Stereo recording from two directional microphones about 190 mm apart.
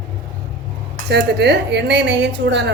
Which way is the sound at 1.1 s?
60° right (ahead or behind).